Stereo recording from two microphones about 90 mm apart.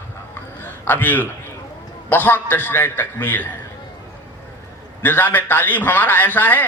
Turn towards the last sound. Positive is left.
turn(degrees=20)  # may be behind; listen again after turning